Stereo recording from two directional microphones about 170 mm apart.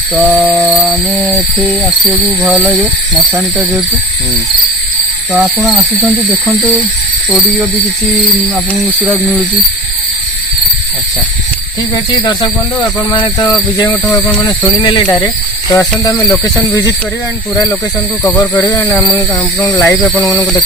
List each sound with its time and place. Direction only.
0.1 s a sound: 5° right (ahead or behind)
2.4 s speech: 5° right (ahead or behind)
5.3 s speech: centre (ahead or behind)
12.2 s speech: 20° left (ahead or behind)
14.4 s speech: 25° left (ahead or behind)
18.2 s speech: 15° left (ahead or behind)